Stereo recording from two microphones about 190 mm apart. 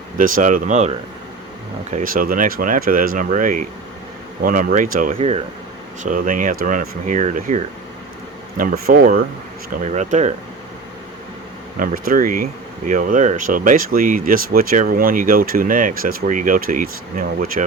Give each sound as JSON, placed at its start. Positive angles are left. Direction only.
{"t": 0.2, "sound": "speech", "side_deg": -45}
{"t": 5.1, "sound": "speech", "side_deg": -30}
{"t": 6.0, "sound": "speech", "side_deg": -45}
{"t": 9.9, "sound": "speech", "side_deg": -35}
{"t": 11.8, "sound": "speech", "side_deg": -45}